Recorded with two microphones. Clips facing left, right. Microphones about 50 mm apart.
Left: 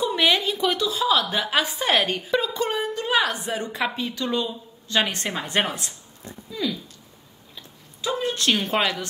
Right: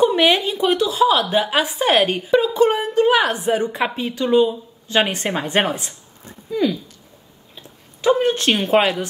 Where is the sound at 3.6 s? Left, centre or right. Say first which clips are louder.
Right 5 dB; centre.